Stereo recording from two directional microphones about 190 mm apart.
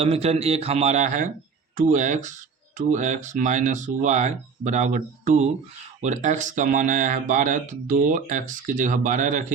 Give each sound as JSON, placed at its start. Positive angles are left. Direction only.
{"t": 0.0, "sound": "speech", "side_deg": -30}